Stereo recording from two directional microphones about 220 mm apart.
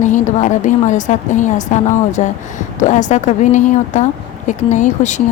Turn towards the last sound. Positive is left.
turn(degrees=35)  # may be behind; listen again after turning